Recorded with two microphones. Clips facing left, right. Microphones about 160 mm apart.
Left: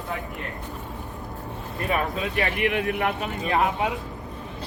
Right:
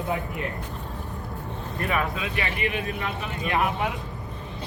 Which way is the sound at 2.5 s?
70° left (ahead or behind).